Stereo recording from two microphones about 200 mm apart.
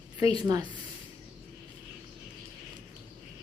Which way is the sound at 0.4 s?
20° right (ahead or behind).